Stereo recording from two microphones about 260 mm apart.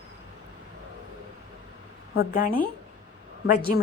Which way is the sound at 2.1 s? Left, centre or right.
Left.